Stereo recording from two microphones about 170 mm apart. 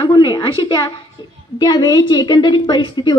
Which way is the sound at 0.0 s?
25° left (ahead or behind).